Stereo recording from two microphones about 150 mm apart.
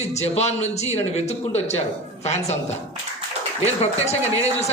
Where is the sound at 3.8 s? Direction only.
45° left (ahead or behind).